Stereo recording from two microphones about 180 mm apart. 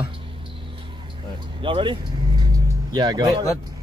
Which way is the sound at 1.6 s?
25° right (ahead or behind).